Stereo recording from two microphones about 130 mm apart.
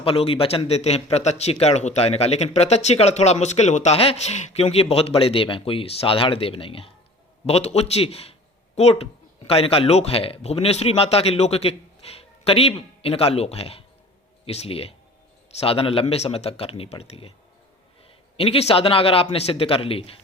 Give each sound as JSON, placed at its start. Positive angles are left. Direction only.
{"t": 0.0, "sound": "speech", "side_deg": 50}
{"t": 18.3, "sound": "speech", "side_deg": 50}